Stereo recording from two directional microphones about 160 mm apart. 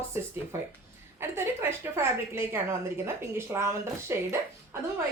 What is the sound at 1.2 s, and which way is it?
A woman's voice, 15° right (ahead or behind).